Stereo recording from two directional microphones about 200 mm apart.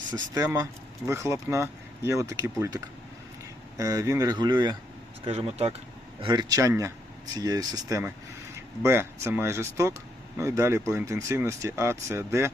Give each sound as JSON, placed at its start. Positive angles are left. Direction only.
{"t": 0.1, "sound": "speech", "side_deg": -15}
{"t": 6.2, "sound": "speech", "side_deg": -20}